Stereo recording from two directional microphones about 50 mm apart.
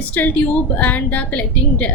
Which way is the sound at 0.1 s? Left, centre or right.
Left.